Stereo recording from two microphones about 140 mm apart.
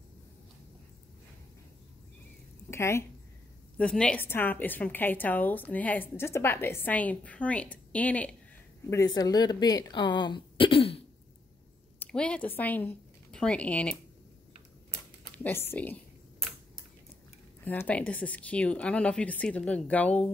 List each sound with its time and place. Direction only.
2.7 s speech: 20° left (ahead or behind)
3.7 s a woman's voice: 10° left (ahead or behind)
8.9 s a woman's voice: 25° left (ahead or behind); by 11.0 s 40° left (ahead or behind)
12.0 s speech: 10° left (ahead or behind)
15.3 s a woman's voice: 15° left (ahead or behind)
17.6 s a woman's voice: 10° left (ahead or behind)